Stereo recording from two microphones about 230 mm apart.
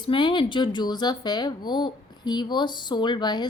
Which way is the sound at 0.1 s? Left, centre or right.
Left.